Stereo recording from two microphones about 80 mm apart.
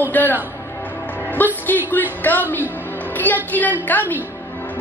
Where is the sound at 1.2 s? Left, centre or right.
Left.